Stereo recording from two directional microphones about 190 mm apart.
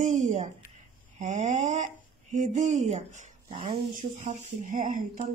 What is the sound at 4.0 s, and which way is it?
Speech, 40° right (ahead or behind).